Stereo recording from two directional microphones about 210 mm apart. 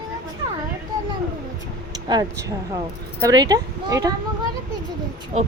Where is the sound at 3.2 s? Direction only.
20° right (ahead or behind).